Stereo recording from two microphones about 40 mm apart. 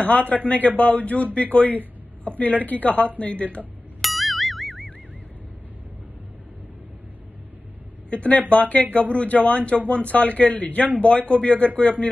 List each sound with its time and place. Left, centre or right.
0.0 s a man's voice: left
4.0 s music: centre
8.1 s a man's voice: left